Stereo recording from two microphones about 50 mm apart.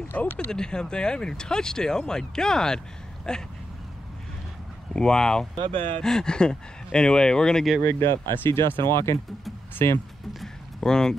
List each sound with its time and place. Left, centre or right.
0.1 s speech: left
0.5 s speech: centre
4.9 s speech: centre
7.8 s speech: left
8.4 s speech: left
10.8 s speech: centre